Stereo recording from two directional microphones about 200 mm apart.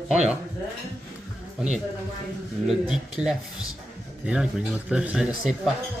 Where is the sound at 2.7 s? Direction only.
5° right (ahead or behind).